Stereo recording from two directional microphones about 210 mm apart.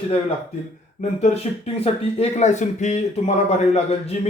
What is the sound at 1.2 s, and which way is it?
A man's voice, 30° left (ahead or behind).